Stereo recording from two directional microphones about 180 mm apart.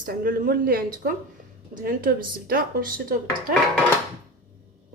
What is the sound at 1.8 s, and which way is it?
Speech, 55° right (ahead or behind).